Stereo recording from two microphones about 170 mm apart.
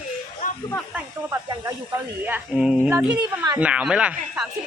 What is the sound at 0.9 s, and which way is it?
Speech, 15° right (ahead or behind).